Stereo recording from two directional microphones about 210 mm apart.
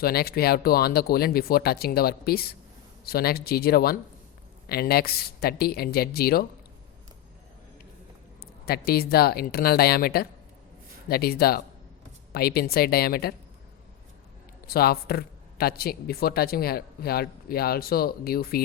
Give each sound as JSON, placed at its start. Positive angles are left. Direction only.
{"t": 0.0, "sound": "speech", "side_deg": 45}
{"t": 8.4, "sound": "speech", "side_deg": 45}
{"t": 14.7, "sound": "speech", "side_deg": 45}